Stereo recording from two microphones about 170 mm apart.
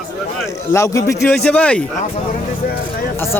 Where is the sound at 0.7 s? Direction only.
20° left (ahead or behind).